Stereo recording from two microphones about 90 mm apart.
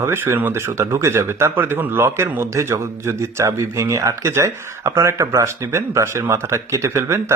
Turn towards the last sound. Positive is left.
turn(degrees=-30)  # may be behind; listen again after turning